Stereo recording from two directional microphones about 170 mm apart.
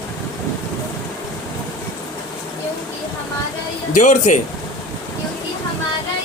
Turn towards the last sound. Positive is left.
turn(degrees=45)  # may be behind; listen again after turning